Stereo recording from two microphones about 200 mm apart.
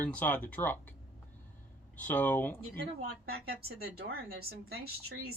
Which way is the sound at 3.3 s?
50° right (ahead or behind).